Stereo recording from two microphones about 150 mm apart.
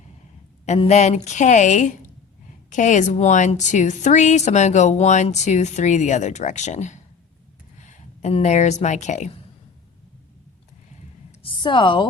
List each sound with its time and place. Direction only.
0.6 s a woman's voice: 50° left (ahead or behind)
11.3 s a woman's voice: 35° left (ahead or behind)